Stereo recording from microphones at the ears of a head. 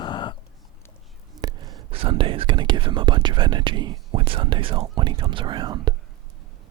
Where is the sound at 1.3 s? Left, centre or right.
Right.